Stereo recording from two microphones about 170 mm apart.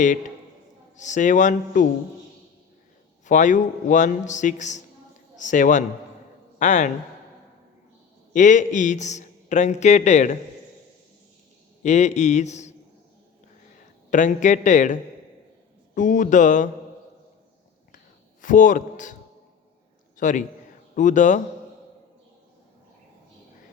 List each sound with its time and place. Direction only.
0.9 s a man's voice: 45° left (ahead or behind)
3.2 s a man's voice: 45° left (ahead or behind)
8.3 s a man's voice: 45° left (ahead or behind)
11.8 s a man's voice: 40° left (ahead or behind)
14.1 s a man's voice: 45° left (ahead or behind)
16.0 s a man's voice: 50° left (ahead or behind)
18.4 s a man's voice: 50° left (ahead or behind)
20.1 s a man's voice: 50° left (ahead or behind)